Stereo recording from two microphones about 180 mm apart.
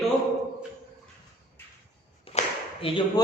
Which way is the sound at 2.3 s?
35° left (ahead or behind).